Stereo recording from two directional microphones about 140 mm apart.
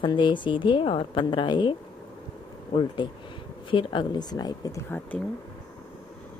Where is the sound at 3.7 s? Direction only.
35° left (ahead or behind).